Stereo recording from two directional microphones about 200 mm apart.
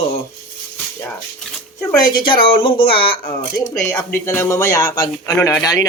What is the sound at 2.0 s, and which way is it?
Speech, 25° left (ahead or behind).